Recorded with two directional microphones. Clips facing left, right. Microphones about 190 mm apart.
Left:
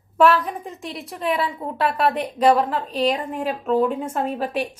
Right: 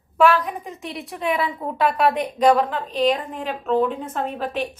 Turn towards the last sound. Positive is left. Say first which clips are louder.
# left 2 dB
turn(degrees=10)  # may be behind; listen again after turning